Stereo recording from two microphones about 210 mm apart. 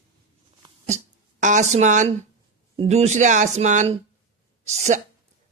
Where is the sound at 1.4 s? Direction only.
35° right (ahead or behind).